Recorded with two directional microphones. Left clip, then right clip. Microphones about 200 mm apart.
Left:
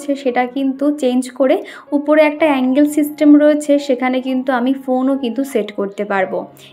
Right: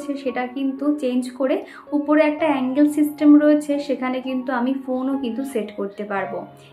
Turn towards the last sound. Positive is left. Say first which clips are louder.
# left 8 dB
turn(degrees=45)  # may be behind; listen again after turning